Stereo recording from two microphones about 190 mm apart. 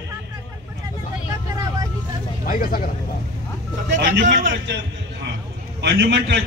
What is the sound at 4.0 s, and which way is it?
Speech, 70° right (ahead or behind).